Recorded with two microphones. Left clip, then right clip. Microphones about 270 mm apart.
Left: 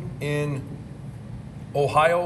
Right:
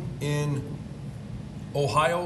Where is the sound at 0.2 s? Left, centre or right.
Centre.